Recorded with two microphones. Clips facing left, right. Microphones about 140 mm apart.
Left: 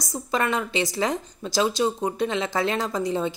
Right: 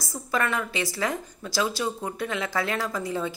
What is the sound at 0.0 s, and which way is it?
A woman's voice, 20° left (ahead or behind).